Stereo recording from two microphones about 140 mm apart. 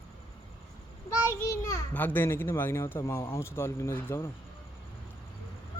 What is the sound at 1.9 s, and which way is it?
A man's voice, 15° left (ahead or behind).